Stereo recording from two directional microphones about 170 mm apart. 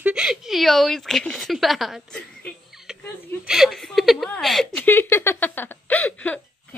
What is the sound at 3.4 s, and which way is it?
Chuckle, centre (ahead or behind).